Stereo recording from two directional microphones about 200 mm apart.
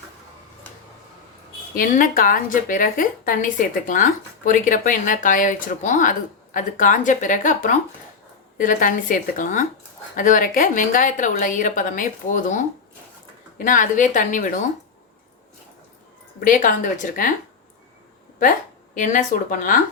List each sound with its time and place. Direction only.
1.7 s a woman's voice: 45° left (ahead or behind)
13.7 s a woman's voice: 40° left (ahead or behind)
16.4 s a woman's voice: 40° left (ahead or behind)
18.9 s a woman's voice: 40° left (ahead or behind)